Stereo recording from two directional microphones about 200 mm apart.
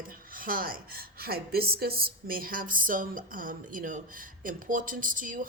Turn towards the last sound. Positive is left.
turn(degrees=-40)  # may be behind; listen again after turning